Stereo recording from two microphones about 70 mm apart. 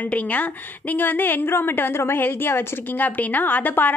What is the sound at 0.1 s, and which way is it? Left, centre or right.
A woman's voice, left.